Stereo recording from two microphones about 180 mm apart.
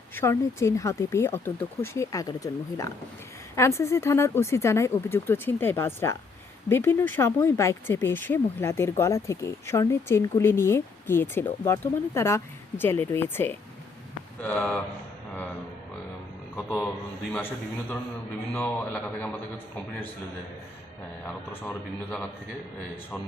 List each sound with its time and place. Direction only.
0.2 s speech: 15° left (ahead or behind)
16.6 s speech: 10° left (ahead or behind)
21.2 s speech: 10° left (ahead or behind)